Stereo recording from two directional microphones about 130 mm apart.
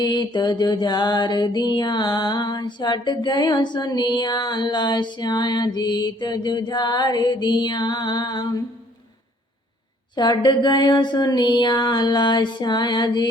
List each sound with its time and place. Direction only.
0.0 s mantra: 35° left (ahead or behind)
10.2 s mantra: 35° left (ahead or behind)